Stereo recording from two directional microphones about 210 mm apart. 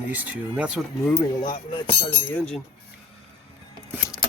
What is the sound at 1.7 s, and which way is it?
Speech, 25° left (ahead or behind).